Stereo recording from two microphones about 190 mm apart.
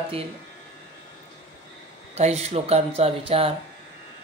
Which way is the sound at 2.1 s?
35° right (ahead or behind).